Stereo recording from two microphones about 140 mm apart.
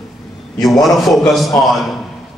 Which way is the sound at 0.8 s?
Centre (ahead or behind).